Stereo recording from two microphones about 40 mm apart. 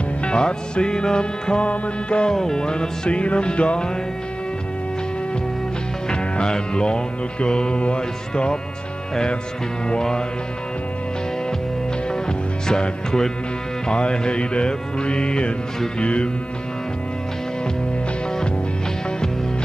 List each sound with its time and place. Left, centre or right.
0.2 s music: left
2.3 s music: centre
6.0 s music: left
9.8 s music: centre
12.1 s music: centre